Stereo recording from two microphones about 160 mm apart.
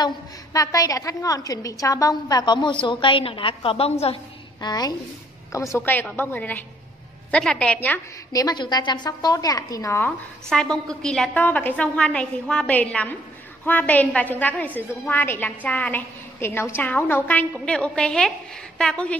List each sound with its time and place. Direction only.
0.0 s a woman's voice: 20° left (ahead or behind); by 4.2 s 40° left (ahead or behind)
4.6 s a woman's voice: 25° left (ahead or behind); by 8.0 s 10° left (ahead or behind)
8.3 s a woman's voice: 25° left (ahead or behind)
10.5 s a woman's voice: 5° left (ahead or behind)